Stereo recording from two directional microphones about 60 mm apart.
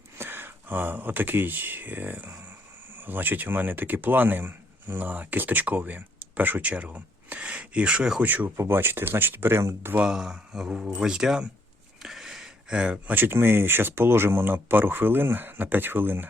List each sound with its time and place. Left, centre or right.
0.2 s speech: right; by 8.2 s centre
8.2 s speech: right
8.5 s speech: right
10.0 s speech: centre
12.0 s a sound: centre
13.1 s speech: right